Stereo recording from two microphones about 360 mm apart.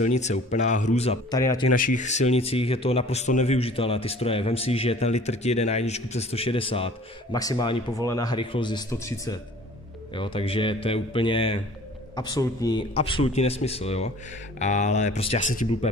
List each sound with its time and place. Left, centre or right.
0.0 s a man's voice: centre
1.8 s a man's voice: left